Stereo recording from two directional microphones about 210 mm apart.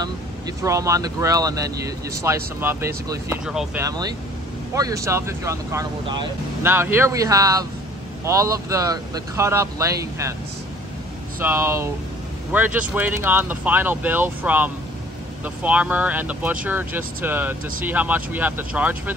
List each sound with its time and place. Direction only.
0.6 s speech: 15° right (ahead or behind)
3.8 s speech: 20° right (ahead or behind)
11.3 s speech: 10° right (ahead or behind)